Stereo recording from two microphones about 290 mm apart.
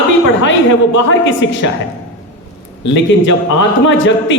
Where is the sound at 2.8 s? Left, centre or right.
Left.